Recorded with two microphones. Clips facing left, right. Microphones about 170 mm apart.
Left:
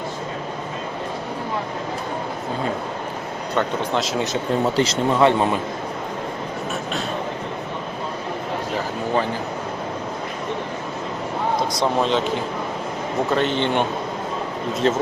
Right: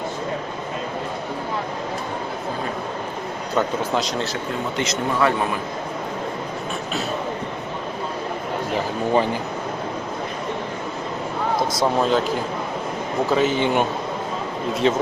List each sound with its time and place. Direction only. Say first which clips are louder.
3.5 s speech: even; centre (ahead or behind)
4.8 s speech: left 2 dB; 30° left (ahead or behind)
11.8 s speech: right 1 dB; 5° right (ahead or behind)
13.3 s speech: right 2 dB; 5° right (ahead or behind)